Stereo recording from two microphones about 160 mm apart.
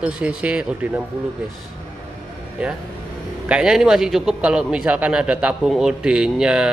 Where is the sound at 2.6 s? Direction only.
5° right (ahead or behind).